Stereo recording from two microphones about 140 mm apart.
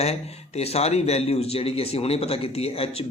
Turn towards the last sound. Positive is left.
turn(degrees=45)  # may be behind; listen again after turning